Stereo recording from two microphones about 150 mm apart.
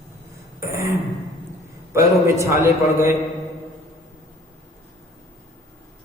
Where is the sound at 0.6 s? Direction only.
20° right (ahead or behind).